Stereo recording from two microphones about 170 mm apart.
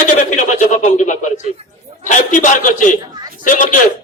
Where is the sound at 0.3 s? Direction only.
45° left (ahead or behind).